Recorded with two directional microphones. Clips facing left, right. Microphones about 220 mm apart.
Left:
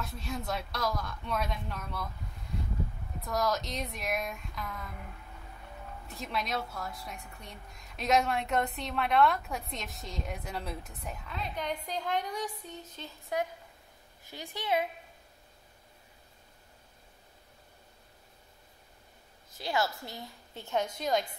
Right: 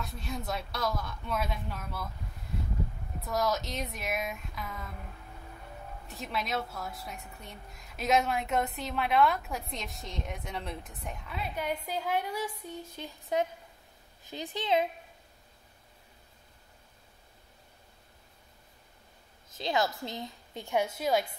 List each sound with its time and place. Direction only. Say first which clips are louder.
0.0 s a woman's voice: even; centre (ahead or behind)
3.3 s a woman's voice: right 1 dB; centre (ahead or behind)
6.0 s a woman's voice: even; centre (ahead or behind)
13.3 s a woman's voice: right 3 dB; 20° right (ahead or behind)
19.5 s a woman's voice: right 2 dB; 20° right (ahead or behind)